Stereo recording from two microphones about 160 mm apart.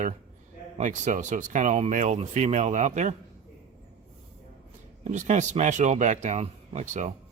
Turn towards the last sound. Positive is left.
turn(degrees=-50)  # may be behind; listen again after turning